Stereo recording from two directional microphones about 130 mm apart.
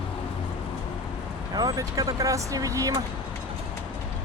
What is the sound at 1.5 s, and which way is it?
Speech, 30° right (ahead or behind).